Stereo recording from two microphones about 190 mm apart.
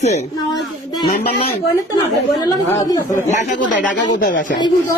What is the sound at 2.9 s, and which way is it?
Speech, 20° left (ahead or behind).